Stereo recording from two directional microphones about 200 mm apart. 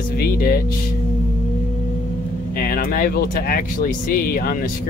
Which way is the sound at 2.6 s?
45° left (ahead or behind).